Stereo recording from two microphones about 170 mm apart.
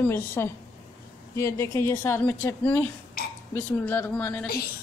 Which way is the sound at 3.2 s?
60° left (ahead or behind).